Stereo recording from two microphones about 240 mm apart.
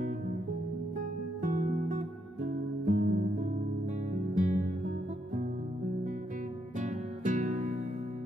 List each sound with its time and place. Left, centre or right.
1.4 s music: right
4.1 s music: right
6.8 s music: right